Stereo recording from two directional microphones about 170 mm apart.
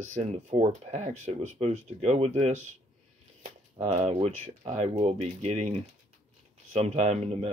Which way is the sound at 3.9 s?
40° right (ahead or behind).